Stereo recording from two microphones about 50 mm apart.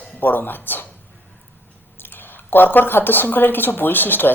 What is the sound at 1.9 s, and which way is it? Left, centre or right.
Speech, left.